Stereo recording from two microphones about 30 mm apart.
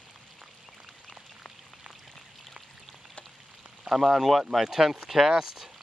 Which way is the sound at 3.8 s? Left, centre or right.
Centre.